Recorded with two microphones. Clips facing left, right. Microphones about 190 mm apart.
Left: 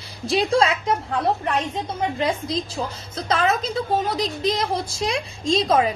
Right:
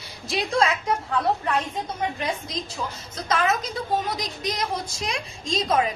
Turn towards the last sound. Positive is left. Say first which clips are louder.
# left 4 dB
turn(degrees=30)  # may be behind; listen again after turning